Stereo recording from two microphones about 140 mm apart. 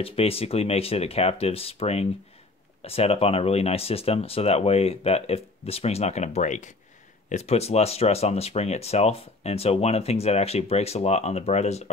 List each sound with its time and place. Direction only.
0.0 s speech: 45° left (ahead or behind)